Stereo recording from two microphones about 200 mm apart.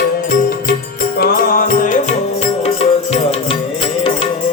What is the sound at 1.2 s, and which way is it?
Music, 45° left (ahead or behind).